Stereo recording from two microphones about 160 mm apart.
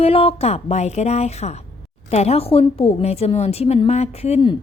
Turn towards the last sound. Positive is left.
turn(degrees=40)  # may be behind; listen again after turning